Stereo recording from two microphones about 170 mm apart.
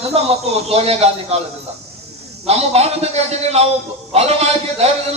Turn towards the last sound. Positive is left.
turn(degrees=-40)  # may be behind; listen again after turning